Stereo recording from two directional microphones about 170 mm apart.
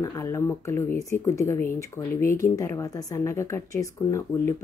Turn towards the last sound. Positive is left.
turn(degrees=15)  # may be behind; listen again after turning